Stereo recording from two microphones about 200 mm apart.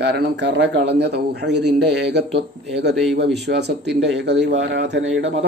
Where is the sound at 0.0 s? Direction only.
60° right (ahead or behind).